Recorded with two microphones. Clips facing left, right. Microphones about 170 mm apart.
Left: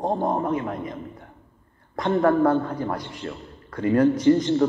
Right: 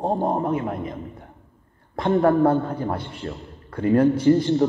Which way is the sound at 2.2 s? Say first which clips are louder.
Even; 30° right (ahead or behind).